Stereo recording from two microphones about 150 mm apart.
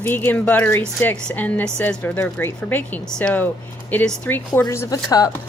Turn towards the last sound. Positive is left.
turn(degrees=25)  # may be behind; listen again after turning